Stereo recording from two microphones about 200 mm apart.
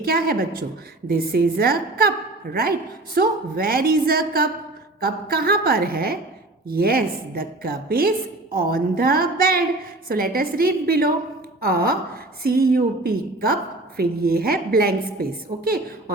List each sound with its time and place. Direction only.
0.0 s a woman's voice: 50° right (ahead or behind)